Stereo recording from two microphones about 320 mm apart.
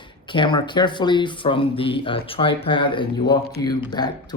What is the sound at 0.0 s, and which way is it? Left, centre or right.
Speech, centre.